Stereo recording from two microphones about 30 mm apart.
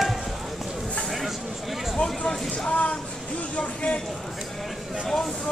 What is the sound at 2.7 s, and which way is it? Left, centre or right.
Speech, left.